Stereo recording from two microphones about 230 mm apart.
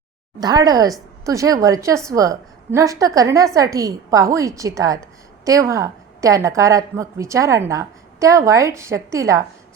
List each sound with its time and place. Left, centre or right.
0.3 s a woman's voice: centre